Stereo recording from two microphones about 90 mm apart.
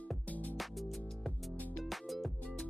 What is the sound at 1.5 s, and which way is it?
Music, 20° left (ahead or behind).